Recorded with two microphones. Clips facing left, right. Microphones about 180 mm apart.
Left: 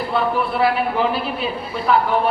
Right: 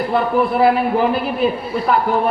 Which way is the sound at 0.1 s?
50° right (ahead or behind).